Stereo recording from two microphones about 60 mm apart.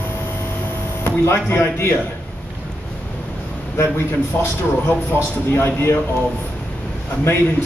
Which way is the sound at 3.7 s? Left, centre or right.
Left.